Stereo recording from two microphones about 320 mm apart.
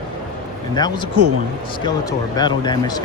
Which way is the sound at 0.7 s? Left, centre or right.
Centre.